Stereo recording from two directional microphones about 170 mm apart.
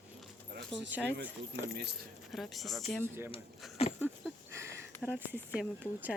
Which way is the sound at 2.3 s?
Centre (ahead or behind).